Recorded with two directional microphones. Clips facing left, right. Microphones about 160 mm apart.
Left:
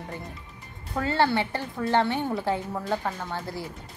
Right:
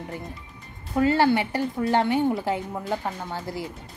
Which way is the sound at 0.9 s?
15° right (ahead or behind).